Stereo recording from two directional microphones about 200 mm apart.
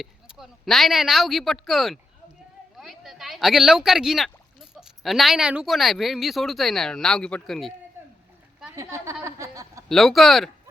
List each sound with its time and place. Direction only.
0.0 s speech: centre (ahead or behind)
8.7 s a woman's voice: 15° right (ahead or behind)
9.2 s a sound: 15° right (ahead or behind)
9.9 s speech: centre (ahead or behind)